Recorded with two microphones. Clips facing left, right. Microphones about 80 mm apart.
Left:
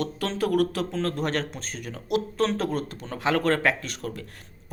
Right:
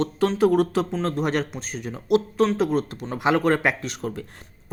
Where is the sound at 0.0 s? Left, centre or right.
Right.